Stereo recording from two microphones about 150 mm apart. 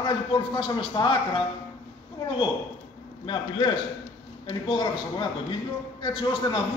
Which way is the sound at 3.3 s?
30° left (ahead or behind).